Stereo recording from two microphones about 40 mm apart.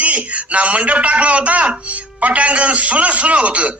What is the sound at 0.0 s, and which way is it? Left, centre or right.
A man's voice, right.